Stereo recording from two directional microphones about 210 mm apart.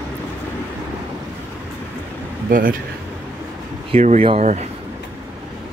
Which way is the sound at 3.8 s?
30° right (ahead or behind).